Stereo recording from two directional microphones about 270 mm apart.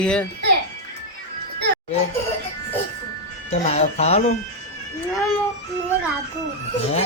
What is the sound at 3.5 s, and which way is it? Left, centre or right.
Speech, left.